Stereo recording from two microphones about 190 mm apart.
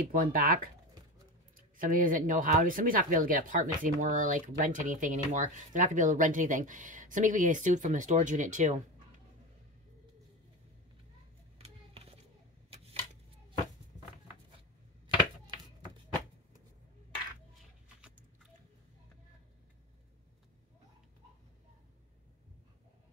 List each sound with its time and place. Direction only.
0.0 s speech: 50° right (ahead or behind)
1.8 s speech: 45° right (ahead or behind)
11.6 s a sound: 30° right (ahead or behind)